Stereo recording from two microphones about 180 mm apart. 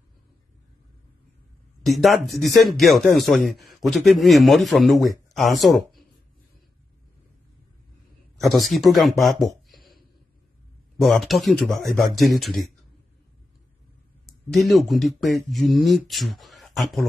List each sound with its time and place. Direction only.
1.9 s a man's voice: centre (ahead or behind)
8.4 s a man's voice: centre (ahead or behind)
9.7 s a sound: centre (ahead or behind)
11.0 s a man's voice: centre (ahead or behind)
14.2 s a man's voice: centre (ahead or behind)